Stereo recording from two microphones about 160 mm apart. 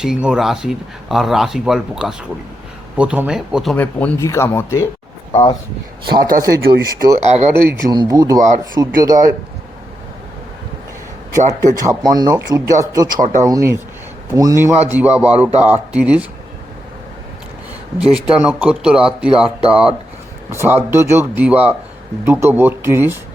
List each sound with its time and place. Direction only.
0.0 s speech: 5° right (ahead or behind)
3.8 s speech: 15° left (ahead or behind)
5.3 s speech: 35° left (ahead or behind)
6.6 s speech: 75° right (ahead or behind)
7.2 s speech: 45° right (ahead or behind)
7.5 s a man's voice: 15° right (ahead or behind)
8.4 s speech: 50° right (ahead or behind)
9.0 s speech: 20° right (ahead or behind)
11.3 s a man's voice: 20° right (ahead or behind)
18.0 s a man's voice: 5° right (ahead or behind)